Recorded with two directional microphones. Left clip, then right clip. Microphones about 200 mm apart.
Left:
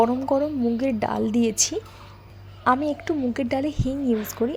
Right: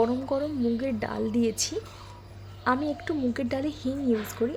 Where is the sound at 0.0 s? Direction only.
15° left (ahead or behind).